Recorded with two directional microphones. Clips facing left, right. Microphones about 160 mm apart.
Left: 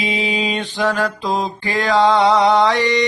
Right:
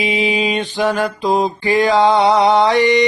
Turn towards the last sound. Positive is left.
turn(degrees=-15)  # may be behind; listen again after turning